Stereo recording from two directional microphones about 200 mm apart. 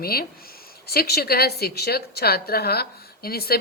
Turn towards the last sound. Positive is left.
turn(degrees=50)  # may be behind; listen again after turning